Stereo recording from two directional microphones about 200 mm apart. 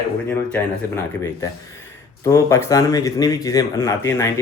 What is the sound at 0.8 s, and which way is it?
Speech, 10° left (ahead or behind).